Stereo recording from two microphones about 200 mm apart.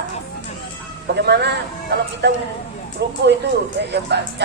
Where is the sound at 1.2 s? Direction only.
55° right (ahead or behind).